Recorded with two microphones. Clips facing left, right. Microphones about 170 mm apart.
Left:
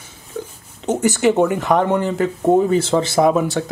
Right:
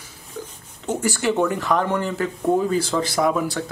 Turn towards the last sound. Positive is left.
turn(degrees=25)  # may be behind; listen again after turning